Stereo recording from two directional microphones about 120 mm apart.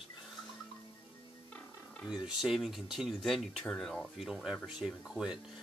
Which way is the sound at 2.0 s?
5° right (ahead or behind).